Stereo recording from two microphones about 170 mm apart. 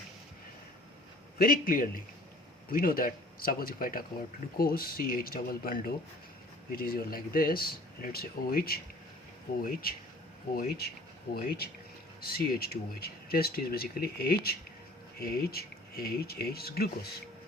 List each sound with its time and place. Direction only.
1.4 s speech: 60° left (ahead or behind)
10.5 s speech: 65° left (ahead or behind)